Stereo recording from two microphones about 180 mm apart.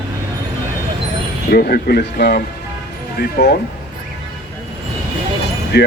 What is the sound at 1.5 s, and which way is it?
Speech, 60° left (ahead or behind).